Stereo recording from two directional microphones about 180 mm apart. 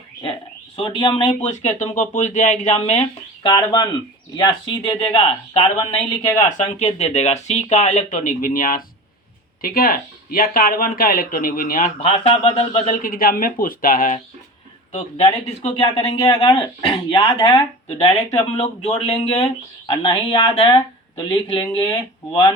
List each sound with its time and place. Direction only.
0.8 s speech: 30° left (ahead or behind)
3.5 s speech: 20° left (ahead or behind)
6.6 s speech: 40° left (ahead or behind)
11.9 s speech: 30° left (ahead or behind)
12.8 s speech: 50° left (ahead or behind)
14.9 s speech: 35° left (ahead or behind)